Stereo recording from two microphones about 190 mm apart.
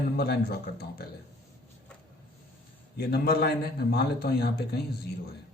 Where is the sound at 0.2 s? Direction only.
55° left (ahead or behind).